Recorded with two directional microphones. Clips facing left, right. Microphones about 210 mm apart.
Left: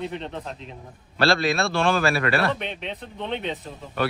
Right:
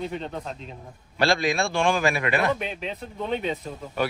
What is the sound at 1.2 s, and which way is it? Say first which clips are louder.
A man's voice: left 1 dB; 15° right (ahead or behind).